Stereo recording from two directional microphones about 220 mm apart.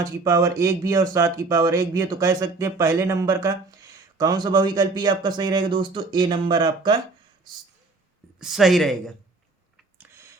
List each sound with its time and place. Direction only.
0.0 s speech: 15° right (ahead or behind)
8.4 s speech: centre (ahead or behind)
10.0 s a sound: 10° right (ahead or behind)